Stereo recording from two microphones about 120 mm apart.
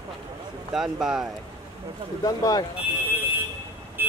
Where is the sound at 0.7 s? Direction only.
5° right (ahead or behind).